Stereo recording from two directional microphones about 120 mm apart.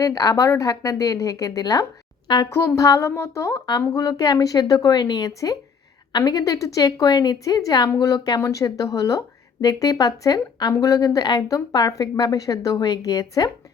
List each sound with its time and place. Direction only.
0.0 s speech: 30° left (ahead or behind)
2.5 s speech: 25° left (ahead or behind)